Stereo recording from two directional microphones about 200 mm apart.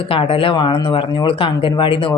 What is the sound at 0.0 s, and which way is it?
Speech, 25° left (ahead or behind).